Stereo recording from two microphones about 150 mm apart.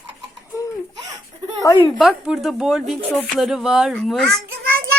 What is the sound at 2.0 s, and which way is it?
A woman's voice, 5° right (ahead or behind).